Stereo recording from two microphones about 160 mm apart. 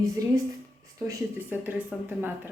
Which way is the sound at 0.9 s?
15° right (ahead or behind).